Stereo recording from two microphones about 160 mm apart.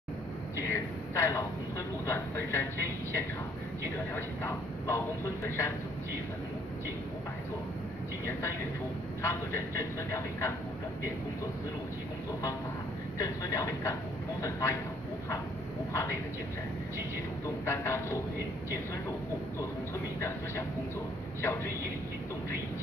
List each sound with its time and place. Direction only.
0.7 s vehicle: 15° left (ahead or behind)
2.0 s speech: 15° left (ahead or behind)
4.1 s speech: 15° left (ahead or behind)
9.2 s speech: 15° left (ahead or behind)
13.2 s speech: 20° left (ahead or behind)
15.9 s speech: 20° left (ahead or behind)
17.6 s speech: 15° left (ahead or behind)
20.2 s speech: 15° left (ahead or behind)